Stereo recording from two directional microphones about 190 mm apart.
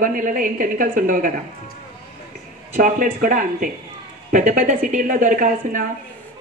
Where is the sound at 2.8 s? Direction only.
45° right (ahead or behind).